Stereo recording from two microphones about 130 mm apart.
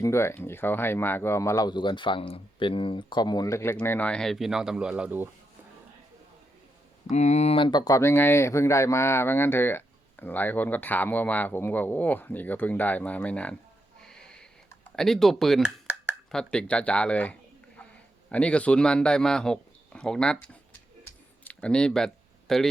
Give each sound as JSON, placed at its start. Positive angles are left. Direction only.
{"t": 0.0, "sound": "speech", "side_deg": 20}
{"t": 7.1, "sound": "speech", "side_deg": 60}
{"t": 14.0, "sound": "snort", "side_deg": 5}
{"t": 14.9, "sound": "speech", "side_deg": 5}
{"t": 21.0, "sound": "a sound", "side_deg": 10}